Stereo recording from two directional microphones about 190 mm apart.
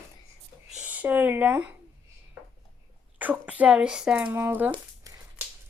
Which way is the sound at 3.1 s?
10° right (ahead or behind).